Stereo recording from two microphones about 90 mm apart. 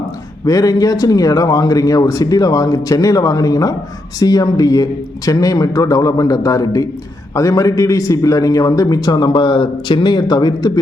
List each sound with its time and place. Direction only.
0.4 s a man's voice: 40° left (ahead or behind)